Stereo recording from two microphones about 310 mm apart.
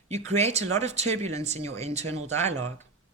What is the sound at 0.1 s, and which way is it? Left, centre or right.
Speech, right.